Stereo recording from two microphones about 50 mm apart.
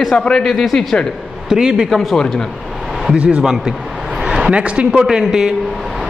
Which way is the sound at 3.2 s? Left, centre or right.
Right.